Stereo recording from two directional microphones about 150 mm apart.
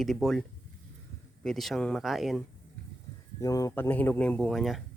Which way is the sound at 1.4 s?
Centre (ahead or behind).